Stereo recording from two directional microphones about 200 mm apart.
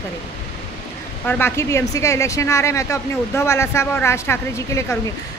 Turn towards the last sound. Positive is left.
turn(degrees=15)  # may be behind; listen again after turning